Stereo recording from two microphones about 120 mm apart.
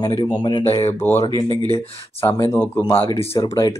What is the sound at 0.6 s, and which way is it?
Speech, 60° left (ahead or behind).